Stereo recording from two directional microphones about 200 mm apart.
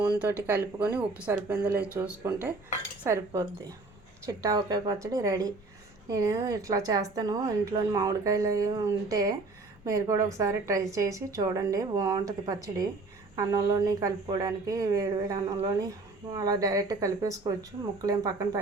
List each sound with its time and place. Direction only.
0.4 s a woman's voice: 10° right (ahead or behind)